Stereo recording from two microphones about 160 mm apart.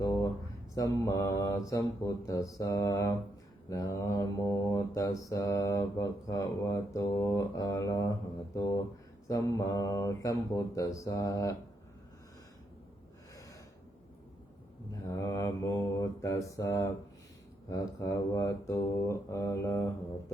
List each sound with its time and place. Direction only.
0.0 s a sound: 20° left (ahead or behind)
0.8 s mantra: 20° left (ahead or behind)
15.0 s mantra: 20° left (ahead or behind)